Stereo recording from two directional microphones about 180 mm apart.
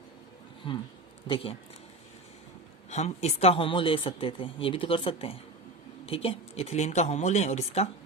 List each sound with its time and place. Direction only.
0.7 s speech: 25° left (ahead or behind)
2.9 s speech: 35° left (ahead or behind)